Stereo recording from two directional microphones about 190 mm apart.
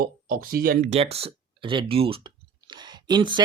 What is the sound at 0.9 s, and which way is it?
Speech, 30° right (ahead or behind).